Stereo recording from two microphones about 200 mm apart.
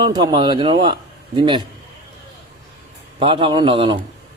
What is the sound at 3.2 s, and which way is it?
Speech, 25° right (ahead or behind).